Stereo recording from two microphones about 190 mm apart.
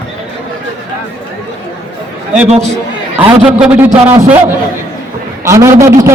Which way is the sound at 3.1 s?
5° right (ahead or behind).